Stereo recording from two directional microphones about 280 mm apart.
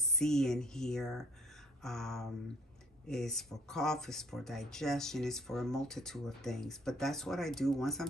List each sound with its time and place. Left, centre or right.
0.0 s speech: centre